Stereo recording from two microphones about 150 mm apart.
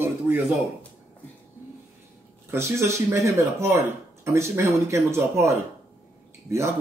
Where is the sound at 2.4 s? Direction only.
15° right (ahead or behind).